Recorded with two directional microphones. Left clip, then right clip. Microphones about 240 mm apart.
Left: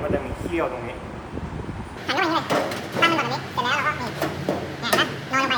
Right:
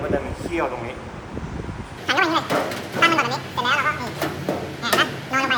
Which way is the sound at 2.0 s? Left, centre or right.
Centre.